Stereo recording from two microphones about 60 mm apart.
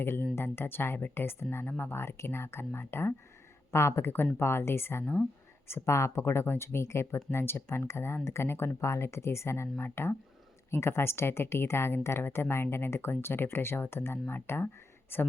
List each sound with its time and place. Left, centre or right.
0.0 s speech: left